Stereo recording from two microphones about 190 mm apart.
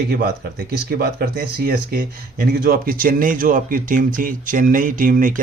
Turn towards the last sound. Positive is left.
turn(degrees=-45)  # may be behind; listen again after turning